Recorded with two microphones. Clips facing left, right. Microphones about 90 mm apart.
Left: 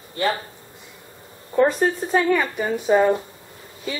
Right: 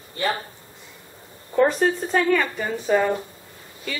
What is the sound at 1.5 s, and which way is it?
A woman's voice, 5° left (ahead or behind).